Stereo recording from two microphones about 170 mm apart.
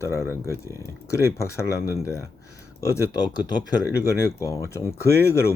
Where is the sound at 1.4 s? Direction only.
15° left (ahead or behind).